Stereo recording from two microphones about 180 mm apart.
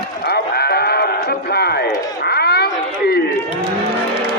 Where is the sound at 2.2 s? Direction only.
65° left (ahead or behind).